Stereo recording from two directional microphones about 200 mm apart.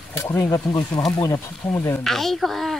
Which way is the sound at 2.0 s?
Centre (ahead or behind).